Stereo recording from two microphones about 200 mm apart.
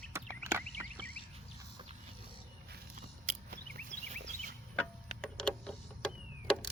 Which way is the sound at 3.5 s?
40° right (ahead or behind).